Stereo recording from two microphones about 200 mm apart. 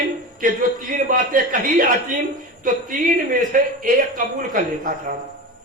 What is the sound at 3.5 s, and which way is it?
A man's voice, 45° right (ahead or behind).